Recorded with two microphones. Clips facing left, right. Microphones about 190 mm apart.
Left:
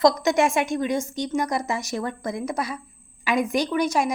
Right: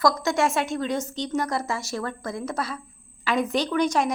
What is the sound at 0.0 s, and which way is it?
A woman's voice, 20° left (ahead or behind).